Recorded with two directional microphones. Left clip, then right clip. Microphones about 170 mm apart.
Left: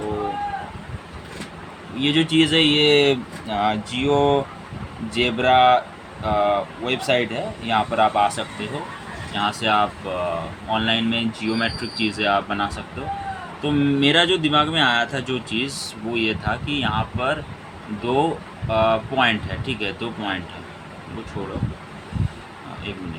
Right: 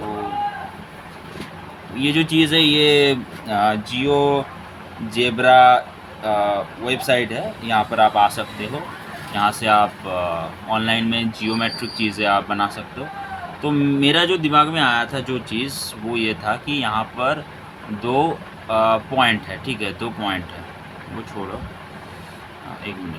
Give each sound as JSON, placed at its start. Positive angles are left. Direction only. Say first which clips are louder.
{"t": 2.0, "sound": "speech", "louder": "right 1 dB", "side_deg": -20}